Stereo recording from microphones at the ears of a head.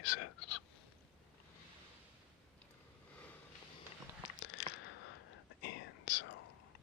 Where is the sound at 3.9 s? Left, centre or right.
Left.